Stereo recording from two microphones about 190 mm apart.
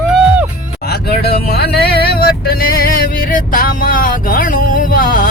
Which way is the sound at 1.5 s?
55° left (ahead or behind).